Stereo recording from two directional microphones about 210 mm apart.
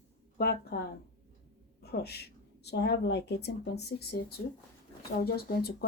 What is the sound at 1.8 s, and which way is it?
Speech, 50° left (ahead or behind).